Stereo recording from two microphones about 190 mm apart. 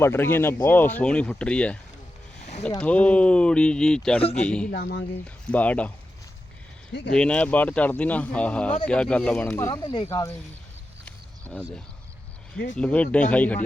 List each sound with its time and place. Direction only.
0.0 s speech: 10° left (ahead or behind)
2.8 s speech: 5° left (ahead or behind)
4.2 s a man's voice: 30° left (ahead or behind)
4.4 s speech: 5° left (ahead or behind)
4.7 s speech: 60° left (ahead or behind)
5.2 s speech: 5° left (ahead or behind)
7.1 s speech: 5° left (ahead or behind)
11.5 s speech: 10° left (ahead or behind)
12.7 s speech: 5° left (ahead or behind)